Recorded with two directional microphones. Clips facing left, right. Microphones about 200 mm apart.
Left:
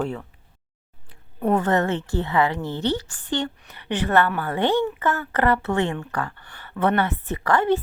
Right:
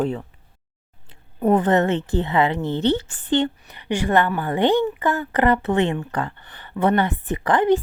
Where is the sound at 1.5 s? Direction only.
20° right (ahead or behind).